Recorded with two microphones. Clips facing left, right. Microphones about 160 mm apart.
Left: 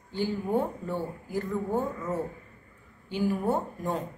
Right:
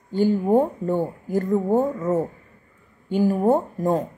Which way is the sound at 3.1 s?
45° right (ahead or behind).